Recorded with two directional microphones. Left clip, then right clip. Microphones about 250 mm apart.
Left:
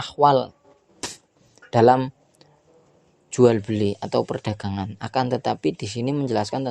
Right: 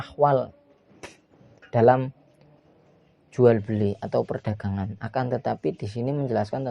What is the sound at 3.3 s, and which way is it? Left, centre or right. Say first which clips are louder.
Speech: left 2 dB; left.